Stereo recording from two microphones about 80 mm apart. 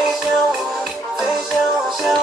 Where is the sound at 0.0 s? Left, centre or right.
Centre.